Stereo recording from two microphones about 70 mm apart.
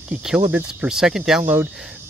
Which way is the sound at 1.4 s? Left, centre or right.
Right.